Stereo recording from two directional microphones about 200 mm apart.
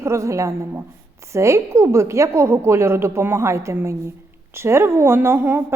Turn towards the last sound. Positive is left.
turn(degrees=-10)  # may be behind; listen again after turning